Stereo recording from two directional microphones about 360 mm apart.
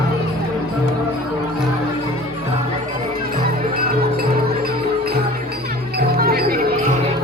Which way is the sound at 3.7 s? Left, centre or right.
Right.